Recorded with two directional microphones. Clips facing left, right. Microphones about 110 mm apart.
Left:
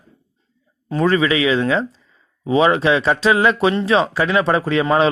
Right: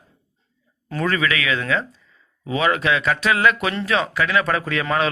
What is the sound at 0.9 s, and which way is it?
Speech, 25° left (ahead or behind).